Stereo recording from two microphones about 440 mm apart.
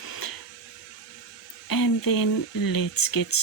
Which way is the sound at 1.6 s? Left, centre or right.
Left.